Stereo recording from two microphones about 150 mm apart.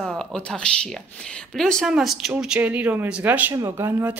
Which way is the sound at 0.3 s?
5° left (ahead or behind).